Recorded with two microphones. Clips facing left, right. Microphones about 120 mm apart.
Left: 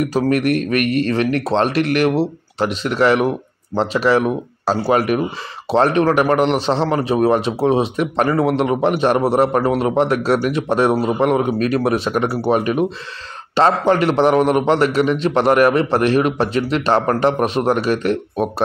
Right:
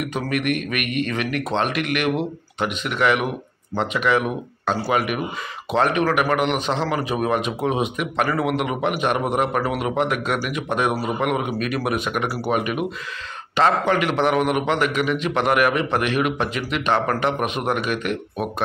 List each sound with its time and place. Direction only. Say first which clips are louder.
0.0 s a man's voice: left 7 dB; 35° left (ahead or behind)